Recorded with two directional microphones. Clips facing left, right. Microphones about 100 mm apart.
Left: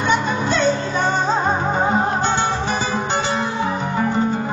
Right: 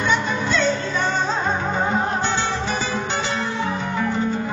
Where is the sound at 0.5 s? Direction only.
40° left (ahead or behind).